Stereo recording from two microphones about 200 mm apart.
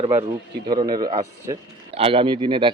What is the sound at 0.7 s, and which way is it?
Speech, 20° right (ahead or behind).